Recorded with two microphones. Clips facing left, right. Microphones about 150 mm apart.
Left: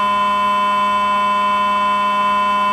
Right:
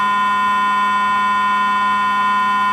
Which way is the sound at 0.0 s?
20° left (ahead or behind).